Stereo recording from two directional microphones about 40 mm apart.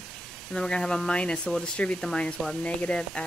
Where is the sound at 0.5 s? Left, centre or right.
Centre; by 3.0 s left.